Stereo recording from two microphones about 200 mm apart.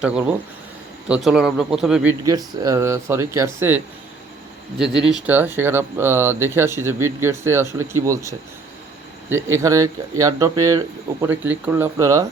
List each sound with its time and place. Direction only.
0.0 s a man's voice: 5° right (ahead or behind)
2.2 s speech: 15° right (ahead or behind)
5.1 s speech: 10° right (ahead or behind)